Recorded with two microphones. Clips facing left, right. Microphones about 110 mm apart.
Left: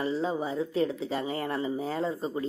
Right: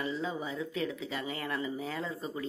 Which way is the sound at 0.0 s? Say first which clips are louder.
Left 6 dB; 40° left (ahead or behind).